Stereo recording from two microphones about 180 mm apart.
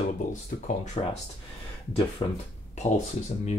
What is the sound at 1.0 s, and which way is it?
Speech, 30° left (ahead or behind).